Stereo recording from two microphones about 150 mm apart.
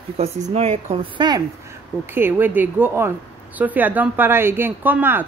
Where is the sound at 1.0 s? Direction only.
30° right (ahead or behind).